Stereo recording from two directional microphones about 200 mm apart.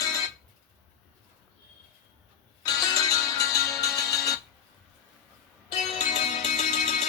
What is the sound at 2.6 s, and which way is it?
Music, 20° left (ahead or behind).